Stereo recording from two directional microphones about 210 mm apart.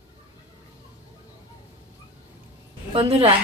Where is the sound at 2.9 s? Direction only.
30° right (ahead or behind).